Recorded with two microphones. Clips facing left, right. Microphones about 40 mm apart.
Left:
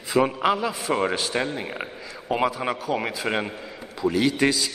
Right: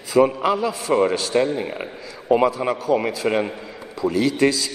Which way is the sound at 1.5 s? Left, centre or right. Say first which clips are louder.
Right 4 dB; centre.